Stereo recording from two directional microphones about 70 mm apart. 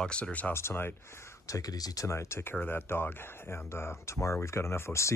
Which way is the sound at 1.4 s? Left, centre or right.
Left.